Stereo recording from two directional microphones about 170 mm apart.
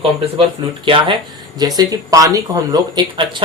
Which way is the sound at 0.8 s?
30° right (ahead or behind).